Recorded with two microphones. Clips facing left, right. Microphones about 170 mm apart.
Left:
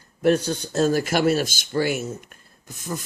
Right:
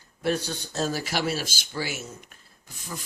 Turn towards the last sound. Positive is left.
turn(degrees=45)  # may be behind; listen again after turning